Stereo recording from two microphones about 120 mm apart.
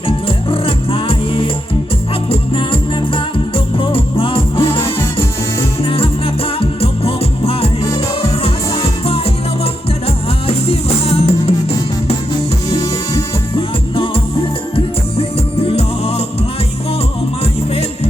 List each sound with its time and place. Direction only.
0.3 s music: 50° left (ahead or behind)
5.8 s music: 50° left (ahead or behind)
10.4 s music: 55° left (ahead or behind)
12.7 s music: 30° left (ahead or behind)
13.6 s music: 50° left (ahead or behind)
15.2 s music: 55° left (ahead or behind)
17.4 s music: 60° left (ahead or behind)